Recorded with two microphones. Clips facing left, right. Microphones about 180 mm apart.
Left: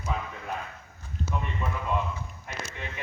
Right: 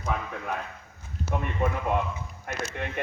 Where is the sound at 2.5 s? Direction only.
55° right (ahead or behind).